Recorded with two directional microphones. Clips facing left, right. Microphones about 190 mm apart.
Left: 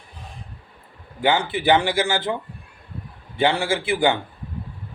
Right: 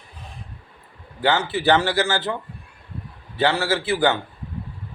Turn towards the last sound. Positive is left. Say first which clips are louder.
# even
turn(degrees=15)  # may be behind; listen again after turning